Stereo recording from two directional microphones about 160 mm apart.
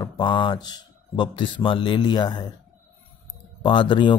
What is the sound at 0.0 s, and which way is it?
Speech, 30° left (ahead or behind).